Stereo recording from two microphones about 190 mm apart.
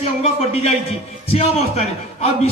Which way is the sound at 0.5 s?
30° left (ahead or behind).